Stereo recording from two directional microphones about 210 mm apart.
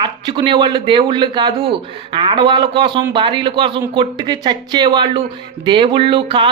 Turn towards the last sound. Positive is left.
turn(degrees=-25)  # may be behind; listen again after turning